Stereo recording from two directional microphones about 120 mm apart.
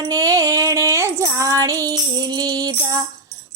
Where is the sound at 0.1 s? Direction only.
30° right (ahead or behind).